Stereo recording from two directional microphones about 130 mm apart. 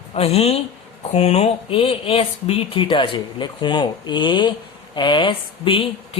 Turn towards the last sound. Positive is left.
turn(degrees=45)  # may be behind; listen again after turning